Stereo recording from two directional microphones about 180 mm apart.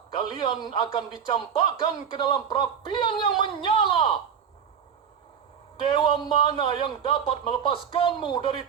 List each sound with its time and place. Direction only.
0.2 s speech: 25° left (ahead or behind)
5.9 s speech: 25° left (ahead or behind)